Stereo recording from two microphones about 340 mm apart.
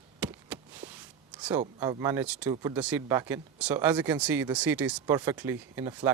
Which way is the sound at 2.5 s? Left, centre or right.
Centre.